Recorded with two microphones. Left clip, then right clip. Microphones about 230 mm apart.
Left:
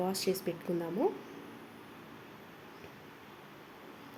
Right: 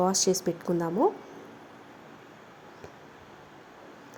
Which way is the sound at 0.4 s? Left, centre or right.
Centre.